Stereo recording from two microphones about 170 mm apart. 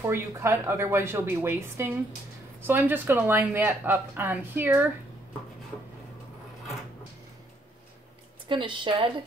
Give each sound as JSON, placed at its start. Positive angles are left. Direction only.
{"t": 0.0, "sound": "speech", "side_deg": -15}
{"t": 8.5, "sound": "a woman's voice", "side_deg": -30}